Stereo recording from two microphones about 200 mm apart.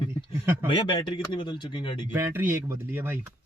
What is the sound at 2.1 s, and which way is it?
Speech, 10° right (ahead or behind).